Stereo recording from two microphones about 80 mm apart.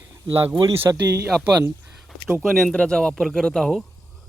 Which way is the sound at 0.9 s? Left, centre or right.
Right.